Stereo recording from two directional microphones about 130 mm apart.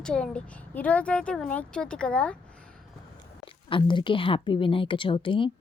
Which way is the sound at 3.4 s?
40° left (ahead or behind).